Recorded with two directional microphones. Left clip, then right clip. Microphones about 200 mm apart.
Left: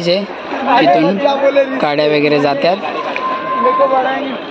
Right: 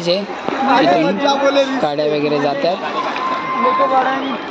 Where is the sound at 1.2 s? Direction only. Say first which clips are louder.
Left 2 dB; 55° right (ahead or behind).